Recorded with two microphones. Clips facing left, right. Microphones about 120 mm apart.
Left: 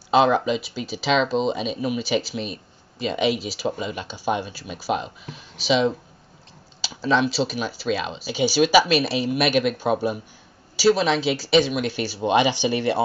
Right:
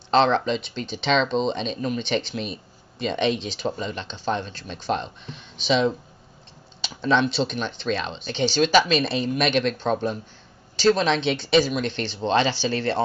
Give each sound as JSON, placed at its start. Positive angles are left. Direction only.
{"t": 0.1, "sound": "speech", "side_deg": 10}